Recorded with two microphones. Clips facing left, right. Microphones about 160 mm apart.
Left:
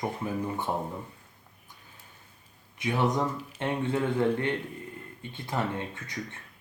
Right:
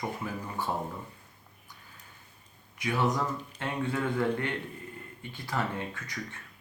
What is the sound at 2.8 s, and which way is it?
Speech, 20° left (ahead or behind).